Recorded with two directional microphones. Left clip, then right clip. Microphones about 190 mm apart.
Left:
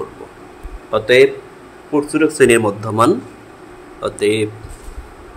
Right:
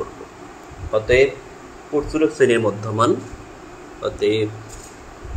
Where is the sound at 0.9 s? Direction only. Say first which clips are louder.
Left 4 dB; 50° left (ahead or behind).